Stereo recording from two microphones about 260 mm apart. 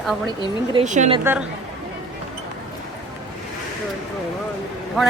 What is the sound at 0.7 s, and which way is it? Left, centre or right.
Speech, right.